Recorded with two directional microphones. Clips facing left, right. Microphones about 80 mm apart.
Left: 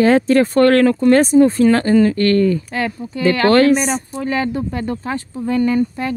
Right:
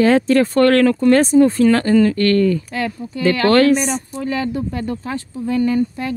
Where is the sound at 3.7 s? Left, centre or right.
Left.